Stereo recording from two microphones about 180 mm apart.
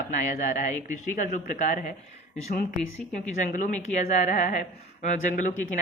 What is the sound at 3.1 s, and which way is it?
A woman's voice, 45° left (ahead or behind).